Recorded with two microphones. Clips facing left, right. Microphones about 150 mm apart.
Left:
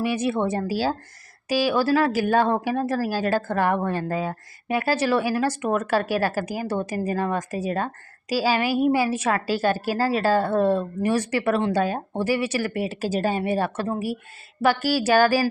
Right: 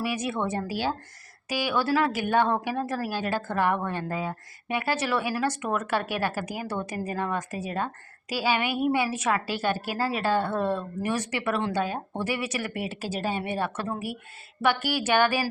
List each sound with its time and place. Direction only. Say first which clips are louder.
0.0 s a woman's voice: left 5 dB; 30° left (ahead or behind)